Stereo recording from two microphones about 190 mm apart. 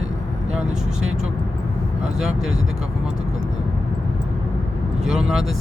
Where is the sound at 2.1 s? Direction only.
Centre (ahead or behind).